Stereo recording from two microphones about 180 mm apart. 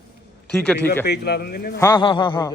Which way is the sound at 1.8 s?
20° left (ahead or behind).